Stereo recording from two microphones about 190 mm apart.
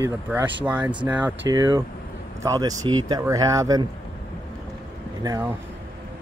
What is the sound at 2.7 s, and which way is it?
Speech, 90° right.